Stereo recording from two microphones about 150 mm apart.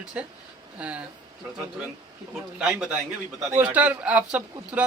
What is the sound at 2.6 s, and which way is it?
A man's voice, 5° right (ahead or behind).